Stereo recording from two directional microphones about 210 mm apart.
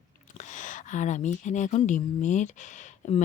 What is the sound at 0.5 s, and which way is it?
Speech, 35° left (ahead or behind).